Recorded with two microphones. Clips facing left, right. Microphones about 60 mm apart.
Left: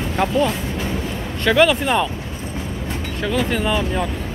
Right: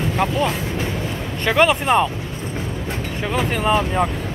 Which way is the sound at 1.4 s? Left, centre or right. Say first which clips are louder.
Left 1 dB; centre.